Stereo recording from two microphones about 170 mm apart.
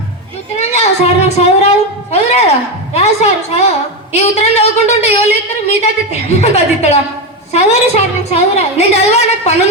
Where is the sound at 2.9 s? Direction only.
40° left (ahead or behind).